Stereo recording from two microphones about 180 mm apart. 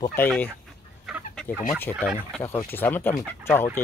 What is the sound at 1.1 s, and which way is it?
Chicken, centre (ahead or behind).